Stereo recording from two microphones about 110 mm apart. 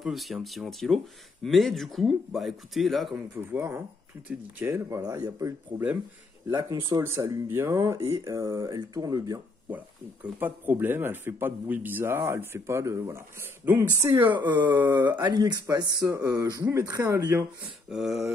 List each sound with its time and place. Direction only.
0.0 s speech: centre (ahead or behind)
3.5 s a man's voice: 20° right (ahead or behind)
10.2 s a man's voice: 15° right (ahead or behind)
14.3 s speech: 40° right (ahead or behind)
15.6 s a man's voice: 30° right (ahead or behind)
17.8 s speech: 5° right (ahead or behind)